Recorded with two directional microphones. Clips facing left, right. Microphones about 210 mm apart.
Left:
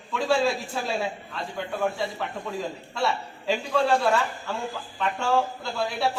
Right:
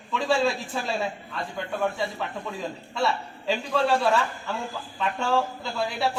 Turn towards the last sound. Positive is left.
turn(degrees=0)  # may be behind; listen again after turning